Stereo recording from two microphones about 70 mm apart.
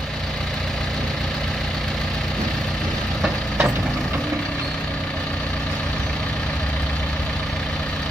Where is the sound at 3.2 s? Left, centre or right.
Centre.